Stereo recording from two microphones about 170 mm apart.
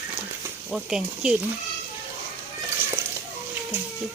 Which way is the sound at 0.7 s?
5° right (ahead or behind).